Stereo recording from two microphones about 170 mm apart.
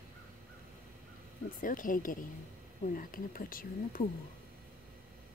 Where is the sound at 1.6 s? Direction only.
55° left (ahead or behind).